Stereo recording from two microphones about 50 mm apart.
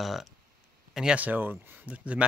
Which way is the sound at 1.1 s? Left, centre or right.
Right.